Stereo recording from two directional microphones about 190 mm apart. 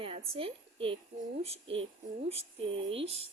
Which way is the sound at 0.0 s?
30° right (ahead or behind).